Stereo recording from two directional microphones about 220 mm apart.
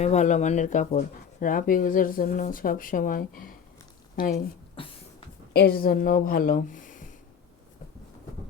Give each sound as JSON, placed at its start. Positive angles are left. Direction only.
{"t": 0.0, "sound": "speech", "side_deg": 30}
{"t": 4.8, "sound": "beatboxing", "side_deg": 25}
{"t": 5.5, "sound": "speech", "side_deg": 45}